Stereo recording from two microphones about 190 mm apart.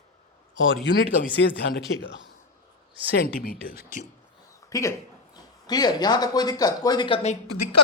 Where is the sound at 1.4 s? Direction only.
65° left (ahead or behind).